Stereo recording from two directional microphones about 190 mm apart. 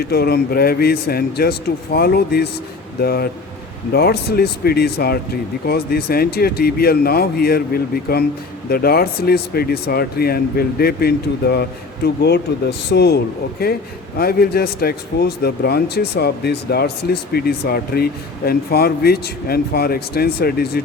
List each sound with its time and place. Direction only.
0.0 s speech: 55° left (ahead or behind)